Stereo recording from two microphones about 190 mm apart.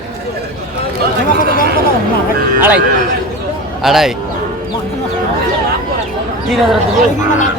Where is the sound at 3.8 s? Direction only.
Centre (ahead or behind).